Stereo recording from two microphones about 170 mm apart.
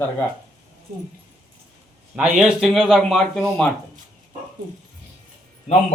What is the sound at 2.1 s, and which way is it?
Speech, 5° right (ahead or behind).